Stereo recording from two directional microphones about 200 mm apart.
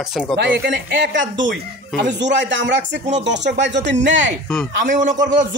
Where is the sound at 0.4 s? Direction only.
55° right (ahead or behind).